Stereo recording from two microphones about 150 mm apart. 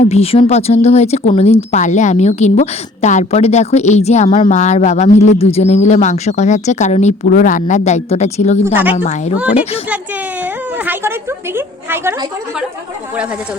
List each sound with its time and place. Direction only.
0.0 s a woman's voice: 45° left (ahead or behind)
8.6 s speech: 15° right (ahead or behind)
10.4 s speech: 15° right (ahead or behind)